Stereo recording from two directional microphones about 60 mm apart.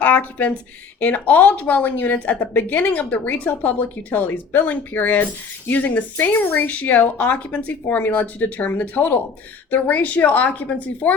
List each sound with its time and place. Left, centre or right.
0.0 s a woman's voice: left